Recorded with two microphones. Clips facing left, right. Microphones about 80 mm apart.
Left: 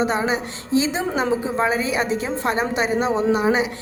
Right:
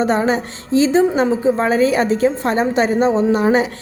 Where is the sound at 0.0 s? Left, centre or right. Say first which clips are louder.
Right 5 dB; right.